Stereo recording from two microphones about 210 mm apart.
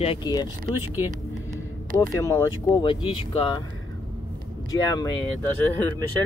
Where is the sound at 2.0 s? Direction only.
15° left (ahead or behind).